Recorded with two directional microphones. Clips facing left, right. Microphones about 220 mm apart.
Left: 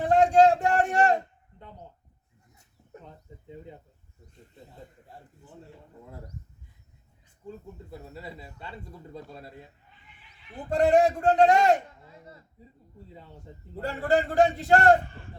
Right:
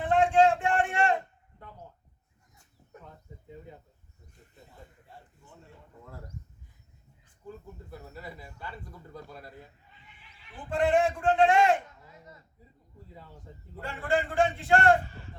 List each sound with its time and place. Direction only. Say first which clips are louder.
0.0 s a sound: left 3 dB; 40° left (ahead or behind)
1.5 s speech: left 2 dB; 25° left (ahead or behind)
7.4 s speech: left 2 dB; 25° left (ahead or behind)
10.5 s a man's voice: left 4 dB; 40° left (ahead or behind)
13.5 s speech: left 2 dB; 25° left (ahead or behind)
13.8 s a man's voice: left 4 dB; 40° left (ahead or behind)